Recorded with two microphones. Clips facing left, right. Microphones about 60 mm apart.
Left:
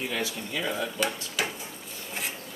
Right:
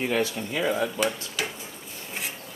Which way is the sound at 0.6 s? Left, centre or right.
Centre.